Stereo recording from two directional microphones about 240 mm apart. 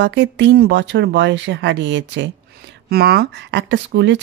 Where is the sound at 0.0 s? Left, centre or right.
Right.